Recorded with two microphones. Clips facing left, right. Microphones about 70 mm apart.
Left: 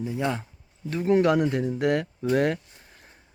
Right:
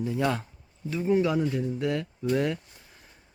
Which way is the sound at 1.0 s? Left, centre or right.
Left.